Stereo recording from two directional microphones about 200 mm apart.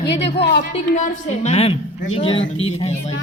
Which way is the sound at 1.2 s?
35° left (ahead or behind).